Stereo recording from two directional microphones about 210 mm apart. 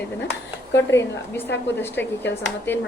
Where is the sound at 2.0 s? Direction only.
55° left (ahead or behind).